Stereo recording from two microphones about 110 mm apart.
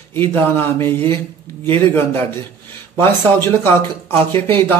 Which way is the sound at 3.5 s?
20° left (ahead or behind).